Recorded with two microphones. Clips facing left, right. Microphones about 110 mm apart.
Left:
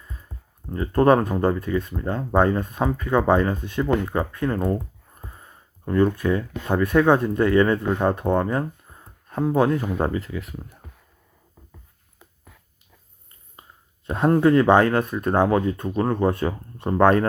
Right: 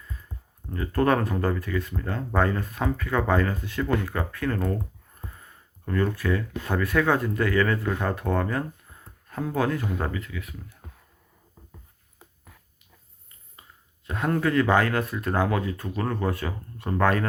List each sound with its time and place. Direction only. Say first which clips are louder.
0.0 s a sound: even; 20° left (ahead or behind)
0.7 s speech: left 6 dB; 25° left (ahead or behind)
14.1 s speech: left 7 dB; 30° left (ahead or behind)